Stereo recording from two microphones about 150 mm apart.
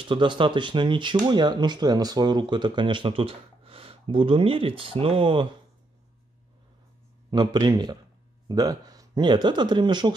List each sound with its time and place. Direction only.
0.0 s speech: 35° right (ahead or behind)
7.2 s speech: 30° right (ahead or behind)